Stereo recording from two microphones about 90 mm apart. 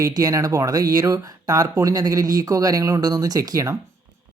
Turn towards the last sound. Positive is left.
turn(degrees=-40)  # may be behind; listen again after turning